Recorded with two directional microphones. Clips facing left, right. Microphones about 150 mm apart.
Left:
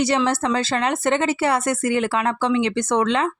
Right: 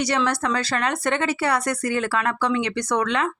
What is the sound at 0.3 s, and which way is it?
Speech, 25° left (ahead or behind).